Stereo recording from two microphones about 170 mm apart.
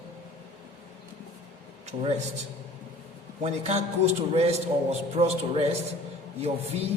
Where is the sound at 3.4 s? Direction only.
40° right (ahead or behind).